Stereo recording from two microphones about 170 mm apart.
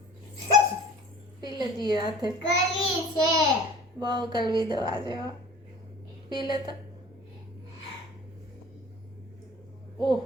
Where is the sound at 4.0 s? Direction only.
25° right (ahead or behind).